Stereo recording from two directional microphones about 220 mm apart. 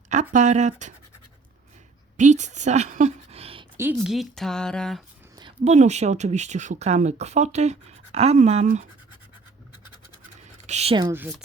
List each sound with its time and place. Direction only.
0.1 s speech: 35° right (ahead or behind)
2.1 s a woman's voice: 35° right (ahead or behind)
3.9 s speech: centre (ahead or behind)
5.4 s speech: 25° right (ahead or behind)
10.4 s scratch: 30° right (ahead or behind)
11.1 s speech: 5° right (ahead or behind)